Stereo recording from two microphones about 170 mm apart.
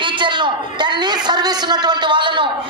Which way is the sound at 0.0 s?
25° right (ahead or behind).